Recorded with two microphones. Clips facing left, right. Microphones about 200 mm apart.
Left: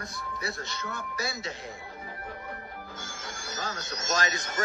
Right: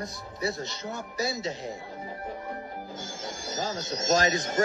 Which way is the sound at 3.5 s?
55° left (ahead or behind).